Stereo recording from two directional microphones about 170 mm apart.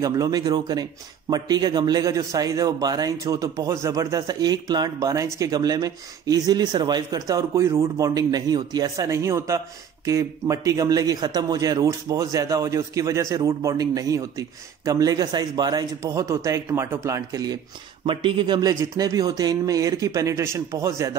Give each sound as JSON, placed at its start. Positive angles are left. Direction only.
{"t": 0.0, "sound": "a man's voice", "side_deg": -20}